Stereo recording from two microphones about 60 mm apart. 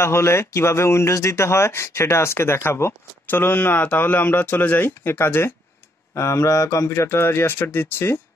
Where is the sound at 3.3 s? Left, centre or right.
Left.